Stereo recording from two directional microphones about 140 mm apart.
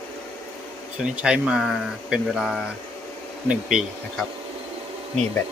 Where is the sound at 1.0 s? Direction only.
5° right (ahead or behind).